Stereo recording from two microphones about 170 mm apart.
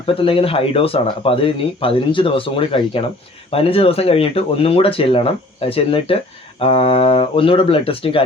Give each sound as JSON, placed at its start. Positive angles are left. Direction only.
{"t": 0.1, "sound": "speech", "side_deg": 30}